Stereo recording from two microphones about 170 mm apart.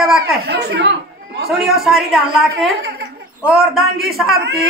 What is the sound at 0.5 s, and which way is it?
Speech, 75° right (ahead or behind).